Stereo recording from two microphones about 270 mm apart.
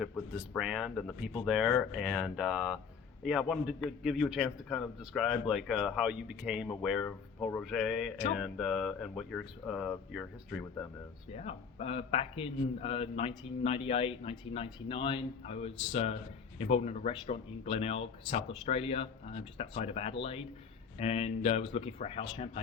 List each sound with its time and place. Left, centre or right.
0.0 s a man's voice: centre
11.3 s a man's voice: left